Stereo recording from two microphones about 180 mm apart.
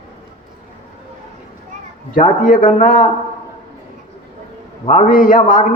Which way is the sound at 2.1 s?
50° left (ahead or behind).